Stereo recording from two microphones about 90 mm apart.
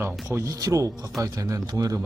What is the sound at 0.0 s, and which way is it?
Speech, 30° right (ahead or behind).